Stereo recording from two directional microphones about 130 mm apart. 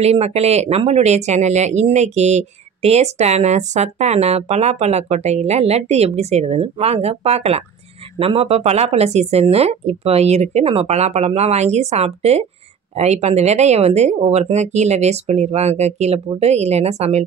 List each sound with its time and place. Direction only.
0.0 s speech: 55° right (ahead or behind)